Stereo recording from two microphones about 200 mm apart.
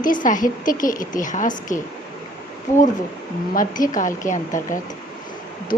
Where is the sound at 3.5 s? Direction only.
45° left (ahead or behind).